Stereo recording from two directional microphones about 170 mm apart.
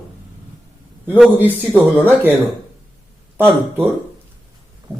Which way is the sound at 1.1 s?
Centre (ahead or behind).